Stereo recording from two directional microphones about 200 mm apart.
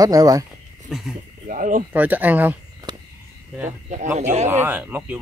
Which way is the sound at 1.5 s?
40° right (ahead or behind).